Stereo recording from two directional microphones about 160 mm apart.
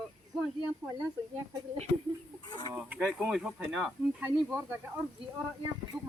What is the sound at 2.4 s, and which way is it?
Speech, 25° left (ahead or behind).